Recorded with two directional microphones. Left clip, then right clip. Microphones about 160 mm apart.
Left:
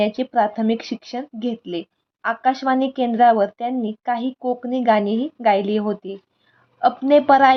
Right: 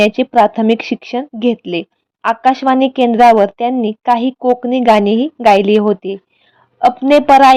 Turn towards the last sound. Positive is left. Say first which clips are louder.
# right 6 dB
turn(degrees=-30)  # may be behind; listen again after turning